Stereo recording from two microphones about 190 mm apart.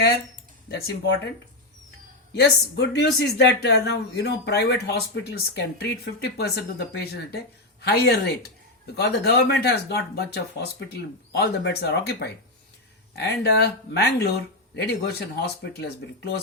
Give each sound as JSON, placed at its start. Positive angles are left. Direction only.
{"t": 2.3, "sound": "speech", "side_deg": 60}